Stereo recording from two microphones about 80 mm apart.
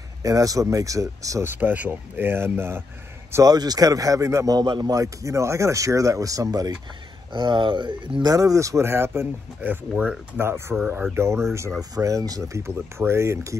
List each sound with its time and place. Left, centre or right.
0.2 s speech: right
1.4 s speech: right
3.4 s speech: right
4.6 s a man's voice: right
4.9 s speech: right
7.3 s speech: right
8.3 s speech: right; by 10.4 s centre
10.4 s speech: right
11.9 s speech: right
12.6 s speech: right